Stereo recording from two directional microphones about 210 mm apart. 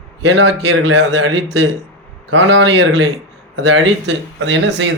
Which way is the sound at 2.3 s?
65° right (ahead or behind).